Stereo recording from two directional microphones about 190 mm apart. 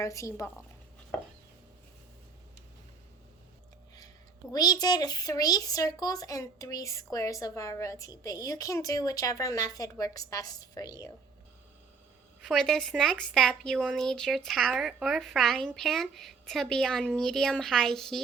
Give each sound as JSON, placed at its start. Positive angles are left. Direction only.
{"t": 0.0, "sound": "speech", "side_deg": 15}
{"t": 4.5, "sound": "a child's voice", "side_deg": 20}
{"t": 12.4, "sound": "a woman's voice", "side_deg": 0}